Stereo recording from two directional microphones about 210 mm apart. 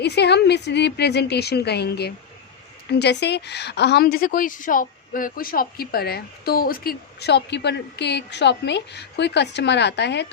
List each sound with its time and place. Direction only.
0.0 s a woman's voice: 50° left (ahead or behind)